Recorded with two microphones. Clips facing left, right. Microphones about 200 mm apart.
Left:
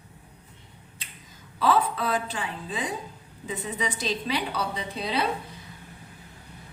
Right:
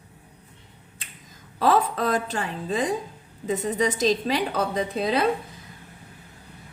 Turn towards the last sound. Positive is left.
turn(degrees=-50)  # may be behind; listen again after turning